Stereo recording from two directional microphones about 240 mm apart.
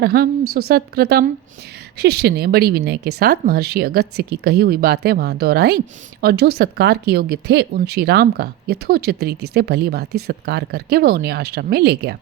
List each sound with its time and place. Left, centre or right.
0.0 s speech: right